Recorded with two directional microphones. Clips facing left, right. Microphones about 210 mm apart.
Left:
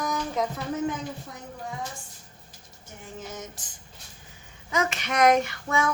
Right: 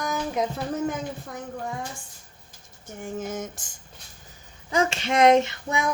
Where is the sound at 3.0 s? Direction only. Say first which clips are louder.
Right 7 dB; 50° right (ahead or behind).